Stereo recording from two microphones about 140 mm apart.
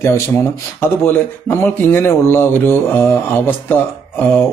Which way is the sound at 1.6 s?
15° left (ahead or behind).